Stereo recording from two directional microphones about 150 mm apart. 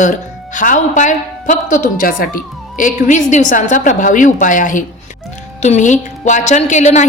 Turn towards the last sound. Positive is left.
turn(degrees=55)  # may be behind; listen again after turning